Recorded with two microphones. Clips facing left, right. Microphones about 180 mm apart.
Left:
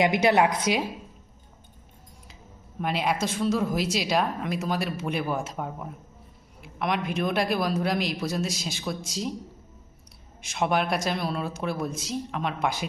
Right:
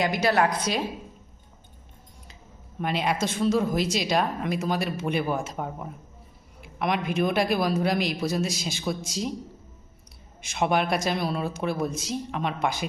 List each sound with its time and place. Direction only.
0.0 s a woman's voice: 20° left (ahead or behind)
2.8 s speech: 5° left (ahead or behind)
10.4 s speech: centre (ahead or behind)